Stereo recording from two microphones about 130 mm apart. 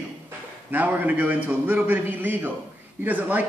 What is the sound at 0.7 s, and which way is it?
Speech, 15° right (ahead or behind).